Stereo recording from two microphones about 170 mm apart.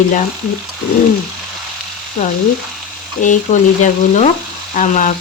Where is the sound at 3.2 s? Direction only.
50° left (ahead or behind).